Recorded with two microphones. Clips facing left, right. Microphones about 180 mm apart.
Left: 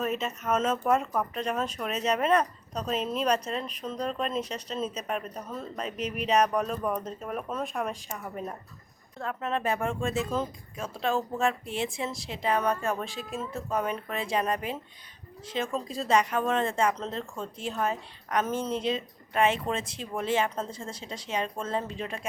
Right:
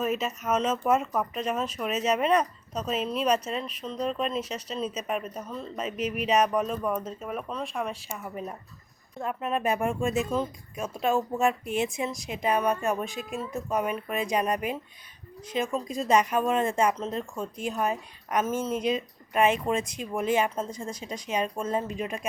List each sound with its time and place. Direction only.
0.2 s speech: 5° right (ahead or behind)
9.1 s speech: 15° right (ahead or behind)
18.4 s speech: 5° right (ahead or behind)